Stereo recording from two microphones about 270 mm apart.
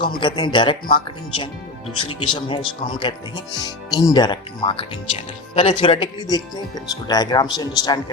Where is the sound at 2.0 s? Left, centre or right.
Centre.